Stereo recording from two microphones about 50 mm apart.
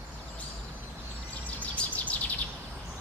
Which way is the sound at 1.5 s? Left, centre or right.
Left.